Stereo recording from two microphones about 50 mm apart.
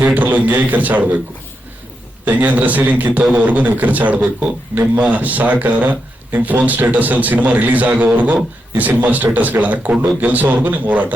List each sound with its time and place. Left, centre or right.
0.0 s speech: right
2.2 s speech: right